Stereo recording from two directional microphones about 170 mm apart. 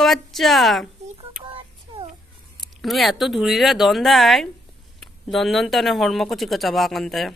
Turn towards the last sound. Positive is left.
turn(degrees=0)  # may be behind; listen again after turning